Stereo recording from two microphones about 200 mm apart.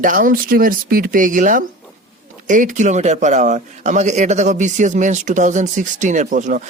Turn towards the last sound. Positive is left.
turn(degrees=-40)  # may be behind; listen again after turning